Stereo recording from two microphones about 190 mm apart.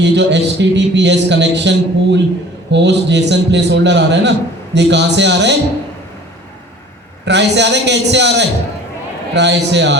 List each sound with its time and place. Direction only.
0.0 s a man's voice: 65° right (ahead or behind)
7.3 s a man's voice: 65° right (ahead or behind)